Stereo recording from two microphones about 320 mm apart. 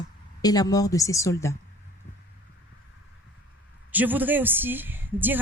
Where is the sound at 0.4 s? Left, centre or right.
Centre.